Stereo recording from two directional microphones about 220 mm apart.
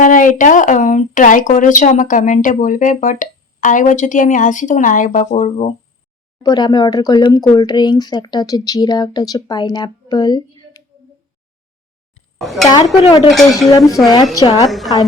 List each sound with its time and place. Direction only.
0.0 s speech: 35° left (ahead or behind)
6.4 s speech: 20° left (ahead or behind)
12.4 s speech: centre (ahead or behind)
13.0 s speech: 20° left (ahead or behind)
13.3 s speech: centre (ahead or behind)
13.7 s a woman's voice: 15° left (ahead or behind)